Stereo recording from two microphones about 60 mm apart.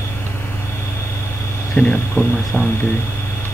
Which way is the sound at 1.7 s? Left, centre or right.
Centre.